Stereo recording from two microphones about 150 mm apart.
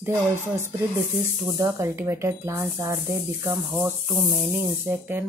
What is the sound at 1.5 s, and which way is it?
Speech, 20° right (ahead or behind).